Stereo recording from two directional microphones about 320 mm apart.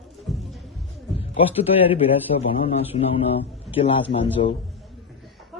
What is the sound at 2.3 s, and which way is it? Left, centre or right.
Speech, left.